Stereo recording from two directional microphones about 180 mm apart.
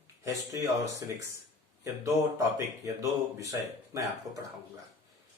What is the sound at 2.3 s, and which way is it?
Speech, 15° right (ahead or behind).